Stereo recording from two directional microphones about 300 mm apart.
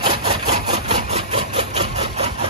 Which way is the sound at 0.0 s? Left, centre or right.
Centre.